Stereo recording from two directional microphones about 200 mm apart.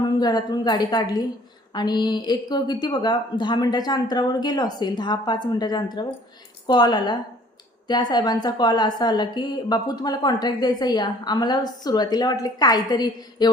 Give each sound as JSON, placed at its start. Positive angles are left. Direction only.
{"t": 0.0, "sound": "a woman's voice", "side_deg": 20}